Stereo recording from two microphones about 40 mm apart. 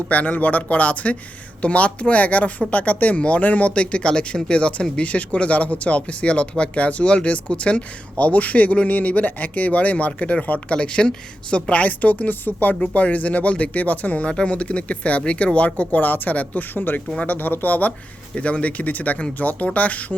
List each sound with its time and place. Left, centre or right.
0.1 s a woman's voice: left
3.8 s a woman's voice: left
18.3 s a woman's voice: left